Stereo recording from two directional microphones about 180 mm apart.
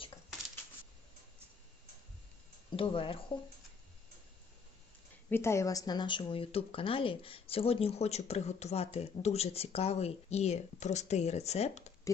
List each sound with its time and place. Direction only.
2.7 s speech: 30° left (ahead or behind)
5.3 s speech: 15° left (ahead or behind); by 11.9 s 35° left (ahead or behind)
12.1 s speech: 15° left (ahead or behind)